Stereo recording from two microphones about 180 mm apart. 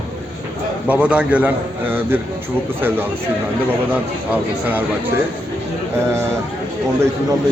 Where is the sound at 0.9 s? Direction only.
5° right (ahead or behind).